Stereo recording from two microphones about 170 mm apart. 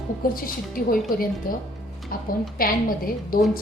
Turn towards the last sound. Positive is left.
turn(degrees=60)  # may be behind; listen again after turning